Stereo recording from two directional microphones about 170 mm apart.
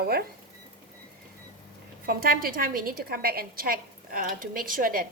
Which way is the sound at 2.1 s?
60° right (ahead or behind).